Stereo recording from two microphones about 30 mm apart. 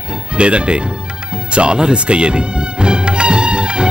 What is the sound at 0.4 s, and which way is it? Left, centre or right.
Speech, right.